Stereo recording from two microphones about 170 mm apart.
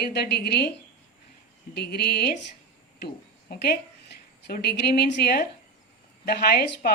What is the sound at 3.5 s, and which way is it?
A woman's voice, 65° left (ahead or behind).